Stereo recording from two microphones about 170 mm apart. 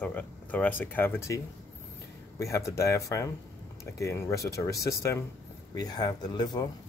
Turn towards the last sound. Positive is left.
turn(degrees=25)  # may be behind; listen again after turning